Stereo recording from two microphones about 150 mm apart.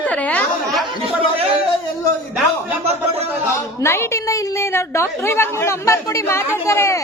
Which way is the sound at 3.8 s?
15° left (ahead or behind).